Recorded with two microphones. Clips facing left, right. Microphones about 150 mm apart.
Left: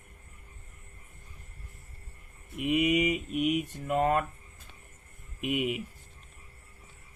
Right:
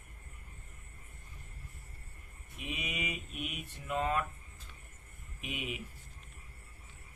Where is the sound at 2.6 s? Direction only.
55° left (ahead or behind).